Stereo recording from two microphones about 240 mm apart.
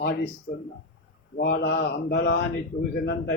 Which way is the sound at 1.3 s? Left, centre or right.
Left.